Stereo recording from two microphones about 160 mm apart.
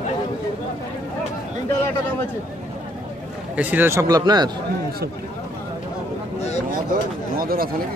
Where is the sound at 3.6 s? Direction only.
10° right (ahead or behind).